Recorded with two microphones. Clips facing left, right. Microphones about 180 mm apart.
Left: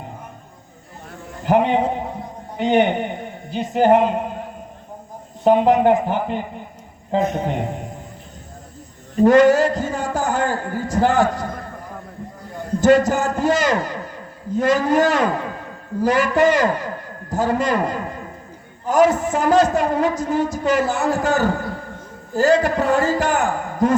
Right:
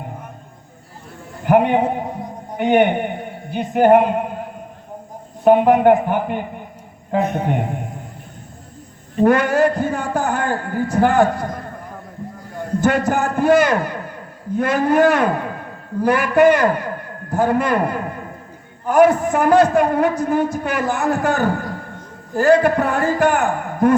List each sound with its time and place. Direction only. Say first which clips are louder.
1.5 s a man's voice: right 2 dB; 55° right (ahead or behind)
5.5 s a man's voice: right 2 dB; 55° right (ahead or behind)
9.2 s a man's voice: left 2 dB; 55° right (ahead or behind)
12.8 s a man's voice: left 3 dB; 55° right (ahead or behind)